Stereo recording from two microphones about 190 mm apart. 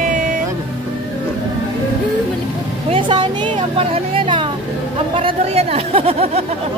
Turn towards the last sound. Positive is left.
turn(degrees=-30)  # may be behind; listen again after turning